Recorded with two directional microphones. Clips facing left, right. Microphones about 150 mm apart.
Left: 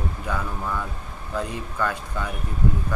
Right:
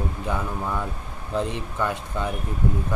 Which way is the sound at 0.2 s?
25° right (ahead or behind).